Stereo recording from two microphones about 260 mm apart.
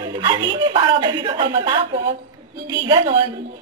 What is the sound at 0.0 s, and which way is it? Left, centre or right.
A woman's voice, centre.